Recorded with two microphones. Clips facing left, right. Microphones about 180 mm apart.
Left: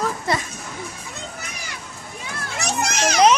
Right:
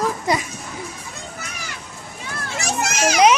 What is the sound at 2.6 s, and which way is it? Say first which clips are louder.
Speech: right 1 dB; 5° right (ahead or behind).